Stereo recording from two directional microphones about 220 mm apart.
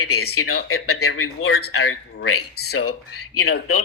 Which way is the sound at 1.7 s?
65° left (ahead or behind).